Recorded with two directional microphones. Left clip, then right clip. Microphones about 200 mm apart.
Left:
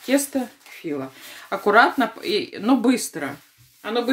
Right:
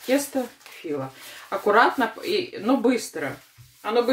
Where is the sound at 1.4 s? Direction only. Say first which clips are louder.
Left 2 dB; 50° left (ahead or behind).